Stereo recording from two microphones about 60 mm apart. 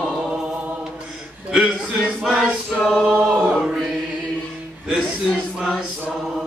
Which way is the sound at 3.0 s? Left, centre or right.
Right.